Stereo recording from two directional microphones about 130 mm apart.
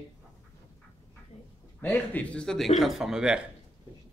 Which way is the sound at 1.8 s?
15° left (ahead or behind).